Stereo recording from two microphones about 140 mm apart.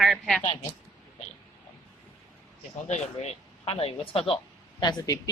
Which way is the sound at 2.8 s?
50° left (ahead or behind).